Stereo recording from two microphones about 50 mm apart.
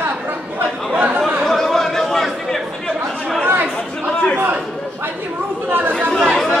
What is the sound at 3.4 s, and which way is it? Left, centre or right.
Chatter, right.